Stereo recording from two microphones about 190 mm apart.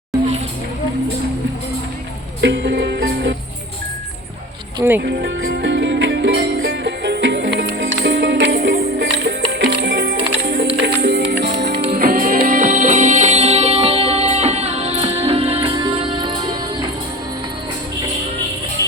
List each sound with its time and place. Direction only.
2.4 s music: 65° right (ahead or behind)
5.0 s music: 60° right (ahead or behind)
11.9 s music: 45° right (ahead or behind); by 16.9 s 25° right (ahead or behind)
18.8 s music: 15° left (ahead or behind)